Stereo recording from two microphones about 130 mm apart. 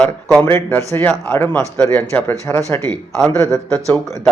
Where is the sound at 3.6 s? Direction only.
5° left (ahead or behind).